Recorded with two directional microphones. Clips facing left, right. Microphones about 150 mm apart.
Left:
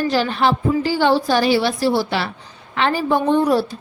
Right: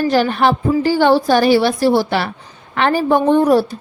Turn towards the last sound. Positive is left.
turn(degrees=-50)  # may be behind; listen again after turning